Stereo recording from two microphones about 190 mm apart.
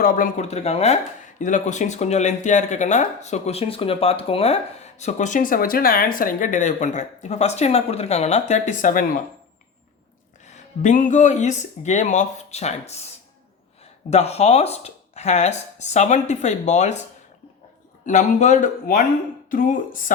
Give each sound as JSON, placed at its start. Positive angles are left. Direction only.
{"t": 0.0, "sound": "speech", "side_deg": 45}
{"t": 10.4, "sound": "speech", "side_deg": 40}
{"t": 14.1, "sound": "speech", "side_deg": 35}
{"t": 18.0, "sound": "speech", "side_deg": 40}